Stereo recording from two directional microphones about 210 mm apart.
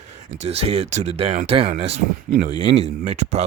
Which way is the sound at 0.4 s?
30° right (ahead or behind).